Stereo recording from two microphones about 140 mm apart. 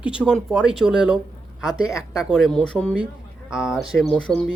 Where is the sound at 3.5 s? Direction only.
5° right (ahead or behind).